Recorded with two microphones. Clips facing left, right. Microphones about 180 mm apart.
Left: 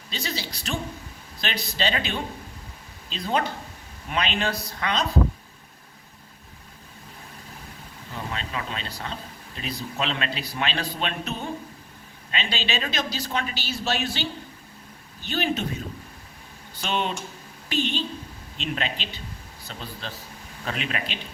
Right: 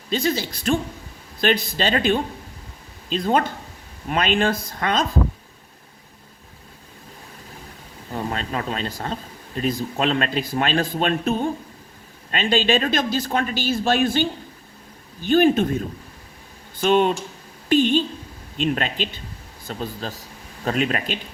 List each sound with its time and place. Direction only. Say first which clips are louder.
0.1 s speech: right 10 dB; 50° right (ahead or behind)
8.1 s speech: right 6 dB; 45° right (ahead or behind)
16.8 s speech: right 10 dB; 50° right (ahead or behind)